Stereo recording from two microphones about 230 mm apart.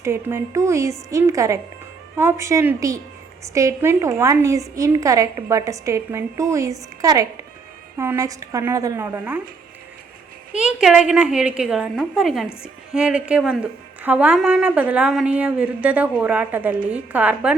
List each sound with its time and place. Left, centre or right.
0.0 s a woman's voice: centre
10.5 s a woman's voice: centre